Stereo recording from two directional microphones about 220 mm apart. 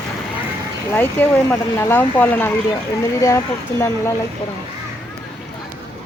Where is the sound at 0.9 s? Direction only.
10° left (ahead or behind).